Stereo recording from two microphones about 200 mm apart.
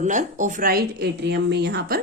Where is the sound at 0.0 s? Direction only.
40° right (ahead or behind).